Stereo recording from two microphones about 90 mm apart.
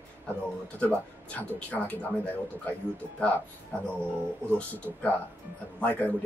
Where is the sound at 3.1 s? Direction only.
15° left (ahead or behind).